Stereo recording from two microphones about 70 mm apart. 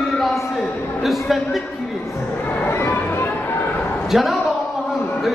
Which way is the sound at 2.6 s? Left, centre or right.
Left.